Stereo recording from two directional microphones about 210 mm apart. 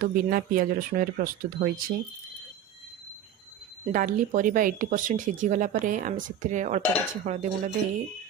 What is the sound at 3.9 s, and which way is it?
Speech, 40° right (ahead or behind).